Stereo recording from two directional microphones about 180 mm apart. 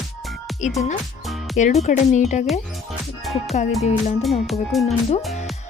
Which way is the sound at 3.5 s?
40° left (ahead or behind).